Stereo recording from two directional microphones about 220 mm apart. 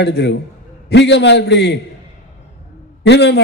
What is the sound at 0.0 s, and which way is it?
A man's voice, 50° left (ahead or behind).